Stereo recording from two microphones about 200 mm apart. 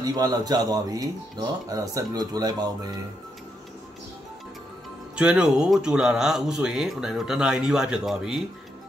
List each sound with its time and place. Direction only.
0.0 s speech: 20° right (ahead or behind)
5.1 s speech: 5° right (ahead or behind)